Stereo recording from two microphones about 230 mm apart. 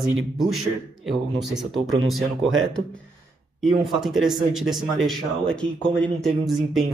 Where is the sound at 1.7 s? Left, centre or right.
Centre.